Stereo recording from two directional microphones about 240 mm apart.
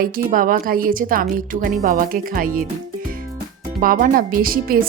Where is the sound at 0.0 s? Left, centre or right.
Right.